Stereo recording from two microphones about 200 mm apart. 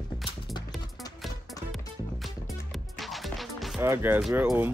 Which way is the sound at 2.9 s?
Centre (ahead or behind).